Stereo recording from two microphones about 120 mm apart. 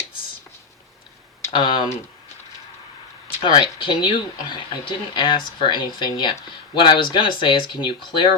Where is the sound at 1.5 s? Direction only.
45° left (ahead or behind).